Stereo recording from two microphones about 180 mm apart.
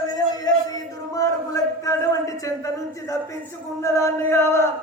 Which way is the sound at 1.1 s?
20° left (ahead or behind).